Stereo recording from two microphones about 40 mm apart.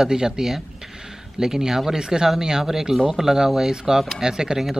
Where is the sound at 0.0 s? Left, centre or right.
Centre.